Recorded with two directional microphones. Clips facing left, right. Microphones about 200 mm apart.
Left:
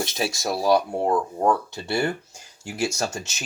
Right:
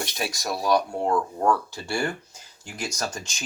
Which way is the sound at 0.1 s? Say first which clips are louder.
Left 4 dB; 25° left (ahead or behind).